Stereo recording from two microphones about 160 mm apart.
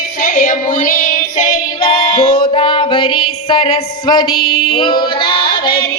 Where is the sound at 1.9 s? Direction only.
40° left (ahead or behind).